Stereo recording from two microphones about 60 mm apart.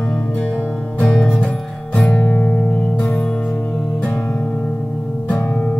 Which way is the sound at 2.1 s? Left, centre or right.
Left.